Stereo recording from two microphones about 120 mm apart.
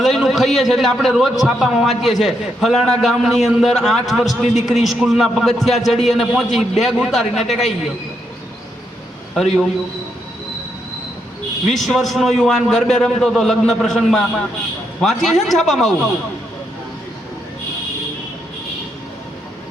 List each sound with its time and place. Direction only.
0.0 s a man's voice: centre (ahead or behind)
9.3 s a man's voice: centre (ahead or behind)
11.7 s a man's voice: centre (ahead or behind)